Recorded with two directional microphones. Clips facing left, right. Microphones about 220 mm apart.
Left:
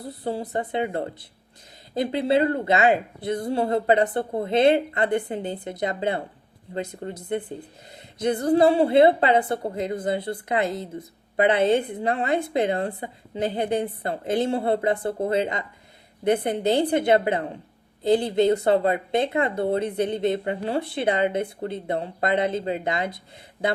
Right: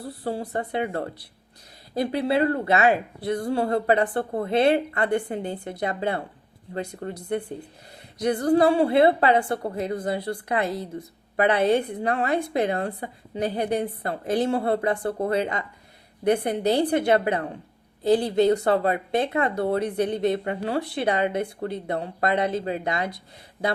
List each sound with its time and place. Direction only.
0.0 s speech: 20° left (ahead or behind)